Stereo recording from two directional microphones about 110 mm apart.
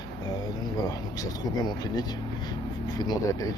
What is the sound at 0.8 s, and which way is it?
Speech, 35° left (ahead or behind).